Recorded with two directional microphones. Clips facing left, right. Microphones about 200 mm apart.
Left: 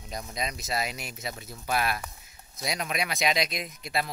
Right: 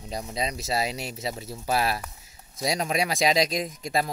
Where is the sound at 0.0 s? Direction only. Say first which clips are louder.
Right 4 dB; 30° right (ahead or behind).